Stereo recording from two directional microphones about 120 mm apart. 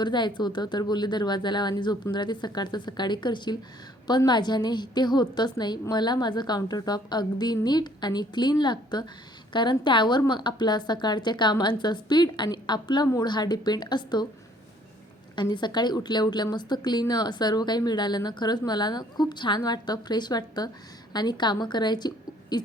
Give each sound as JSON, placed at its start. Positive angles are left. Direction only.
{"t": 0.0, "sound": "a woman's voice", "side_deg": 40}
{"t": 15.4, "sound": "a woman's voice", "side_deg": 40}